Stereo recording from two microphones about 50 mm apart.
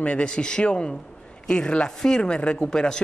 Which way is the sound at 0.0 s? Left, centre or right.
Left.